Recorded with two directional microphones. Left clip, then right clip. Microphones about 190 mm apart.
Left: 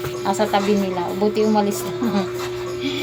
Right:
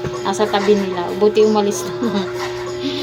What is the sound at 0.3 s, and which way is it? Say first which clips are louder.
A woman's voice: right 3 dB; 20° left (ahead or behind).